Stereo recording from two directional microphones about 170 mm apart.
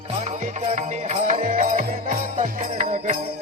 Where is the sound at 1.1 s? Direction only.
45° right (ahead or behind).